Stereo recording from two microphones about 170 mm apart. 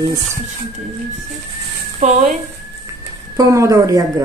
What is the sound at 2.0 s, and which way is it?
Speech, 45° right (ahead or behind).